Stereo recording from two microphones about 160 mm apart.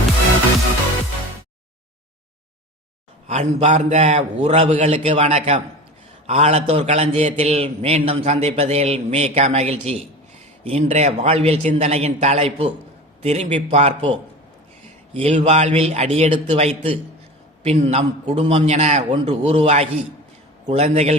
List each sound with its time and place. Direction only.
3.2 s a man's voice: 45° right (ahead or behind)